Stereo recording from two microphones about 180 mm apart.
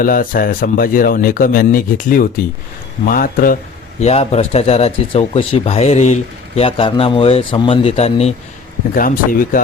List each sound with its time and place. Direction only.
0.0 s speech: 50° left (ahead or behind)
4.0 s speech: 35° left (ahead or behind)
9.0 s speech: 50° left (ahead or behind)